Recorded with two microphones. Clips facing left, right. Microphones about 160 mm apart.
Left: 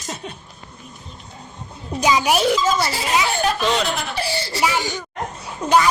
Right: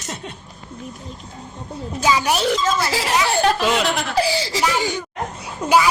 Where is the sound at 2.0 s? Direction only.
15° left (ahead or behind).